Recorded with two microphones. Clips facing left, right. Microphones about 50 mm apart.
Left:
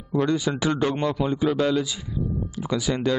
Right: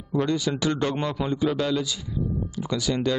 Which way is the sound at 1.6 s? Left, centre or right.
Centre.